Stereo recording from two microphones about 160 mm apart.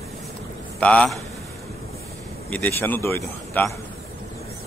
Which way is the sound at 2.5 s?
10° left (ahead or behind).